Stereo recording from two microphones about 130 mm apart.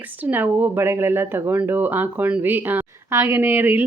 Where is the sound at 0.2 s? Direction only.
15° right (ahead or behind).